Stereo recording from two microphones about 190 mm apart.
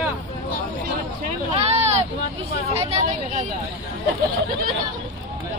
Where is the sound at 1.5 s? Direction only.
35° right (ahead or behind).